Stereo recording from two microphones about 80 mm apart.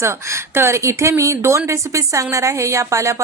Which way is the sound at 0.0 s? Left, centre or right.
Right.